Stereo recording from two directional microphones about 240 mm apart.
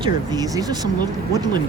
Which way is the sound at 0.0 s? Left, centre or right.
Centre.